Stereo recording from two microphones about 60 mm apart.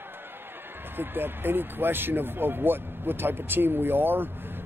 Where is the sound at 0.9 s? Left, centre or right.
Right.